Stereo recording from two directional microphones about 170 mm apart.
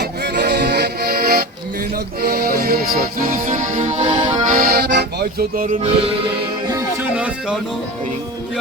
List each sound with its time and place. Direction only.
0.0 s music: 75° right (ahead or behind); by 5.7 s 60° right (ahead or behind)
5.8 s music: 35° right (ahead or behind)
6.7 s music: 20° right (ahead or behind)
7.2 s music: 5° right (ahead or behind)